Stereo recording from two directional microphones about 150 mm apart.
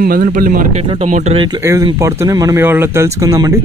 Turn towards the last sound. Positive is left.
turn(degrees=-25)  # may be behind; listen again after turning